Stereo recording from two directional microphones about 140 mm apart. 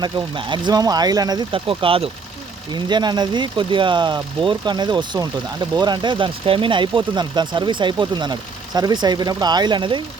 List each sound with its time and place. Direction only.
0.0 s speech: 35° right (ahead or behind)